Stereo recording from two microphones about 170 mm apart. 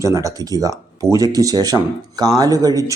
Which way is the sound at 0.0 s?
20° right (ahead or behind).